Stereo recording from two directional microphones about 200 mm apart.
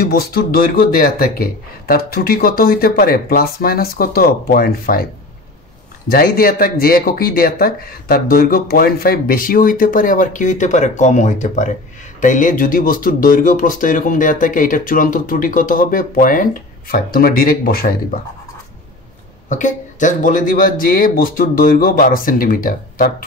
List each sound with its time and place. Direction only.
0.0 s speech: 50° left (ahead or behind)
6.0 s speech: 50° left (ahead or behind)
19.5 s speech: 40° left (ahead or behind)